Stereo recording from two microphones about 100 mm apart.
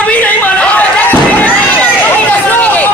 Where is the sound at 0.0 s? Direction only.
15° left (ahead or behind).